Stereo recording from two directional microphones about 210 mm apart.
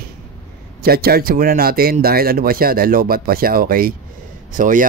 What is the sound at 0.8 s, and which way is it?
Speech, 45° right (ahead or behind).